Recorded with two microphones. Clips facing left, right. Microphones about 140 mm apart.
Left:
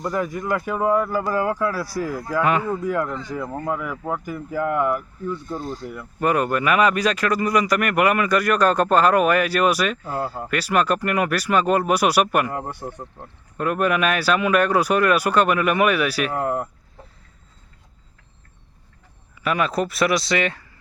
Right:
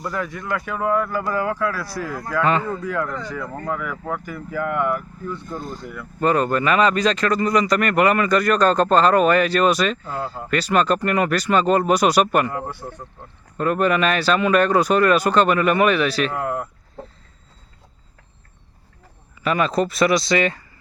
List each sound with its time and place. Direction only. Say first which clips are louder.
0.0 s speech: left 3 dB; 20° left (ahead or behind)
1.8 s speech: left 3 dB; 40° left (ahead or behind)
2.3 s speech: right 1 dB; 10° left (ahead or behind)
16.3 s speech: left 1 dB; 35° left (ahead or behind)
19.4 s speech: right 2 dB; 5° left (ahead or behind)